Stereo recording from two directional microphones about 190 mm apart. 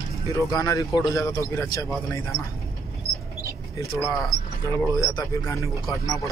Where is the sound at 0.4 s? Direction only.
20° left (ahead or behind).